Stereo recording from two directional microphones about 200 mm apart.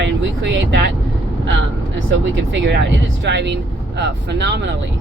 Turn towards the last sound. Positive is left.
turn(degrees=-60)  # may be behind; listen again after turning